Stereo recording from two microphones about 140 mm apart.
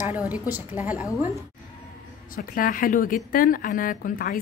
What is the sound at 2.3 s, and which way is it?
A woman's voice, 90° left.